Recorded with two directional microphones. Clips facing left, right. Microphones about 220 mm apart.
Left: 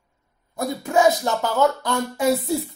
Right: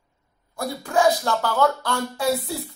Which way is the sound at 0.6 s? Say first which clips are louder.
Left 2 dB; 20° left (ahead or behind).